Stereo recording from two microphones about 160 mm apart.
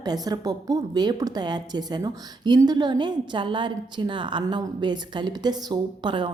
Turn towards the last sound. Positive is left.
turn(degrees=-30)  # may be behind; listen again after turning